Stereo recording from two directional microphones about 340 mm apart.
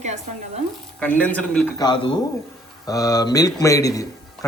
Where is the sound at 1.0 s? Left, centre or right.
Centre.